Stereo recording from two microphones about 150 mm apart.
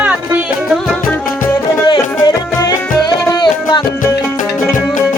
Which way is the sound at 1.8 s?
30° left (ahead or behind).